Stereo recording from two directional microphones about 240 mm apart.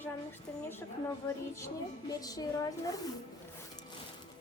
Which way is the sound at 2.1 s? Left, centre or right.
Centre.